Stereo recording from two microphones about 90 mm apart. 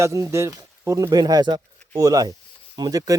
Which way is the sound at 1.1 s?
50° right (ahead or behind).